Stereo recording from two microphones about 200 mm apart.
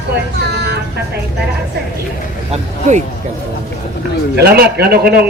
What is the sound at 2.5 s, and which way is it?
Speech, 35° right (ahead or behind).